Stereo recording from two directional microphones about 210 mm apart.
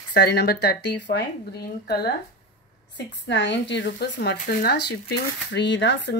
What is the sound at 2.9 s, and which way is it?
Speech, 60° left (ahead or behind).